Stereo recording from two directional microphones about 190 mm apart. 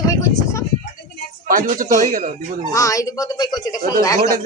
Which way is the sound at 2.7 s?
15° left (ahead or behind).